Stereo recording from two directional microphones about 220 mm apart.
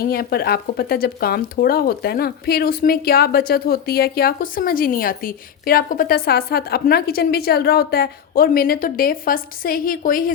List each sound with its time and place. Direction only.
0.0 s speech: 45° left (ahead or behind)